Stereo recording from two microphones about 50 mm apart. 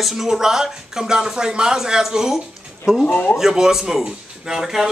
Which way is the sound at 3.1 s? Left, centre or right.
Left.